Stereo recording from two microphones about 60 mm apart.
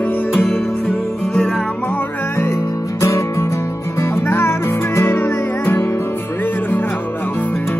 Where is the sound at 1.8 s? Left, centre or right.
Left.